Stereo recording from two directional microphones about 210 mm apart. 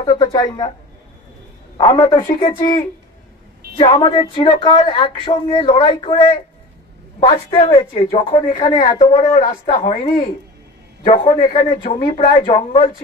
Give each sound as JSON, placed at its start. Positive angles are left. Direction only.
{"t": 0.0, "sound": "speech", "side_deg": 20}
{"t": 1.8, "sound": "speech", "side_deg": 25}
{"t": 7.2, "sound": "speech", "side_deg": 25}
{"t": 11.4, "sound": "speech", "side_deg": 20}